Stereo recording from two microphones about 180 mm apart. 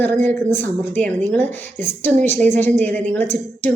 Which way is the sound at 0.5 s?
10° left (ahead or behind).